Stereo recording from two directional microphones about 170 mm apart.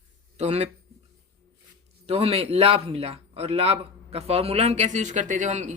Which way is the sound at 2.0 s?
35° right (ahead or behind).